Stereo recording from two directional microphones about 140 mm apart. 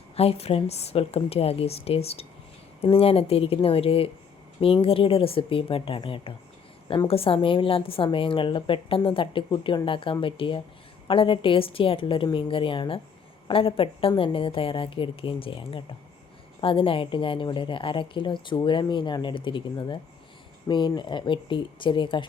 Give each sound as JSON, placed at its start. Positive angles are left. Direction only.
{"t": 0.2, "sound": "a woman's voice", "side_deg": 45}
{"t": 7.1, "sound": "a woman's voice", "side_deg": 40}